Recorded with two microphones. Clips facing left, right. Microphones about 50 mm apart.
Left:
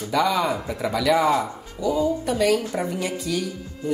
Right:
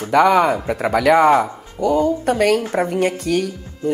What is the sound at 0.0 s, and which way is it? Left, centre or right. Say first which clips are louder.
Speech: right 8 dB; right.